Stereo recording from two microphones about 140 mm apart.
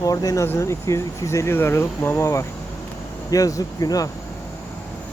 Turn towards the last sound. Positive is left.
turn(degrees=25)  # may be behind; listen again after turning